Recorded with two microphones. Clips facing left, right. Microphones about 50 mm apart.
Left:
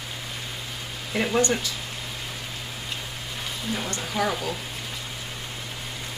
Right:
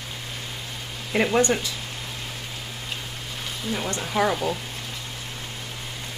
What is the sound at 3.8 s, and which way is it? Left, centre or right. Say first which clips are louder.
Speech: right 4 dB; centre.